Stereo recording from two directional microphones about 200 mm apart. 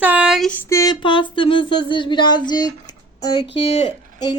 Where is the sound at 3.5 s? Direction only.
30° left (ahead or behind).